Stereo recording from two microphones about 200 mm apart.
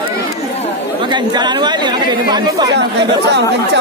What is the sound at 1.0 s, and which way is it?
Speech, 20° right (ahead or behind).